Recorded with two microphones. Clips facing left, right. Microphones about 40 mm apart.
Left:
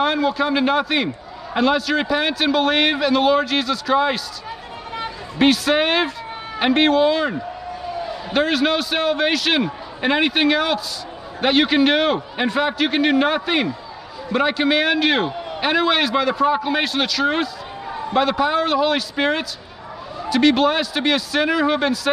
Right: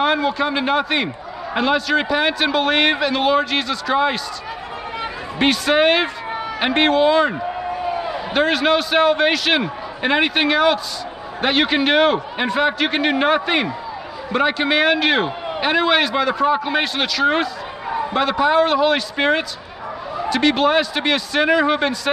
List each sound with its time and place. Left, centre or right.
0.0 s a man's voice: centre
5.4 s a man's voice: centre
7.3 s a sound: right
8.3 s a man's voice: centre